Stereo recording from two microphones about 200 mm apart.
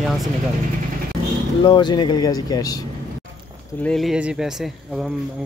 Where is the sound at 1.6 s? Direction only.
20° left (ahead or behind).